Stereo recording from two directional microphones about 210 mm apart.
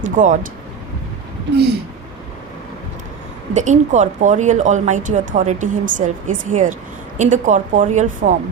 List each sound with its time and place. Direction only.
0.0 s speech: 35° right (ahead or behind)
3.5 s speech: 35° right (ahead or behind)